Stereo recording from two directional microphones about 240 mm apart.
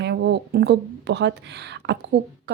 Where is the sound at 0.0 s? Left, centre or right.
Right.